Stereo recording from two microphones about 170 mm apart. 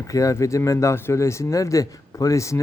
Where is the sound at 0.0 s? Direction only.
20° left (ahead or behind).